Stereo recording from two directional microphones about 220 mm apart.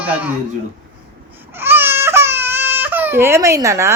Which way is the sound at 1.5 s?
10° right (ahead or behind).